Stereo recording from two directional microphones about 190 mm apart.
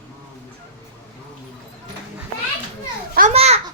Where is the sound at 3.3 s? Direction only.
30° right (ahead or behind).